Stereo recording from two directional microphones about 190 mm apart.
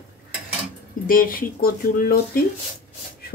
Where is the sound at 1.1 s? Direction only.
50° left (ahead or behind).